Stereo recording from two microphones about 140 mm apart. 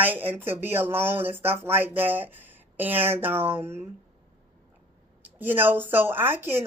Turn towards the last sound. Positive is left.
turn(degrees=-15)  # may be behind; listen again after turning